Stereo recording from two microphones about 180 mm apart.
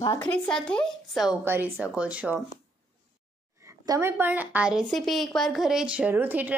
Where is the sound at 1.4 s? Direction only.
10° right (ahead or behind).